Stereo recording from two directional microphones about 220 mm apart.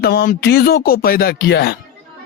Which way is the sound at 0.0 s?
45° left (ahead or behind).